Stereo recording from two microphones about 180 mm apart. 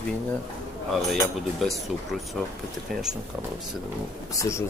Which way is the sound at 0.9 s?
Centre (ahead or behind).